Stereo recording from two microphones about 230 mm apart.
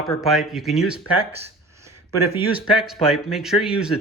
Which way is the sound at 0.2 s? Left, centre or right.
Centre.